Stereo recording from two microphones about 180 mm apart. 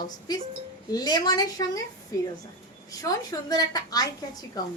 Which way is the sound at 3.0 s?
20° left (ahead or behind).